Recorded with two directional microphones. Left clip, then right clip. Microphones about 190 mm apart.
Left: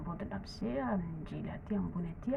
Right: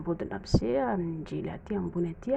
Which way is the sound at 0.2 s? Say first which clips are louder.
Right 11 dB; 40° right (ahead or behind).